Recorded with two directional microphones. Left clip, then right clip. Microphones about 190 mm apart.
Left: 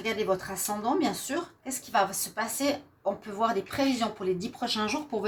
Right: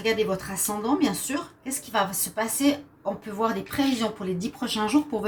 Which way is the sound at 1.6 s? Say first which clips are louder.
Even; 35° left (ahead or behind).